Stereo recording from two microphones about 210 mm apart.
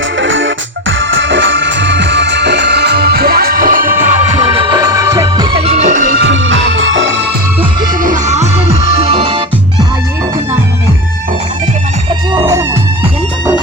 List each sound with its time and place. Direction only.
0.2 s music: 65° right (ahead or behind); by 4.3 s 40° right (ahead or behind)
4.5 s music: 20° right (ahead or behind); by 6.1 s 40° right (ahead or behind)
6.2 s music: 60° right (ahead or behind)
8.0 s music: 35° right (ahead or behind)